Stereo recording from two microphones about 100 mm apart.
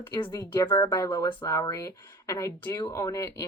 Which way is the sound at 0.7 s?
45° left (ahead or behind).